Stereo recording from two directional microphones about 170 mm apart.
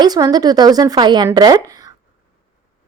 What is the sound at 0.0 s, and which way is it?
A woman's voice, 20° right (ahead or behind).